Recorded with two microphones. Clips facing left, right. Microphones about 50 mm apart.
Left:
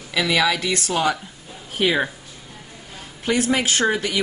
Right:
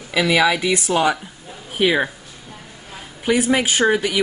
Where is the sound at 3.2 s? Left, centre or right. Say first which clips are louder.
Right 3 dB; centre.